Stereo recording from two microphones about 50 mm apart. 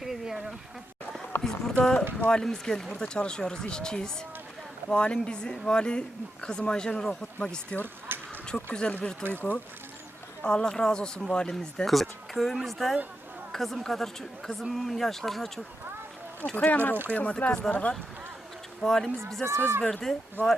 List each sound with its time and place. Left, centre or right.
0.0 s a sound: centre
1.4 s speech: centre
8.1 s a sound: right
8.4 s speech: centre
9.3 s speech: left
10.4 s speech: centre
11.9 s speech: centre
16.6 s speech: left
18.8 s speech: centre
19.5 s speech: right
19.9 s speech: centre
20.4 s speech: right